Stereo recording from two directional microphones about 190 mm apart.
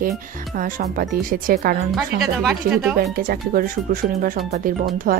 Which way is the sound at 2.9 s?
50° right (ahead or behind).